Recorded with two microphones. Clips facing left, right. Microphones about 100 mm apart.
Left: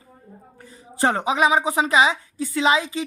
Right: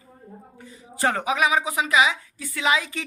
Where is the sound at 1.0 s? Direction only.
25° left (ahead or behind).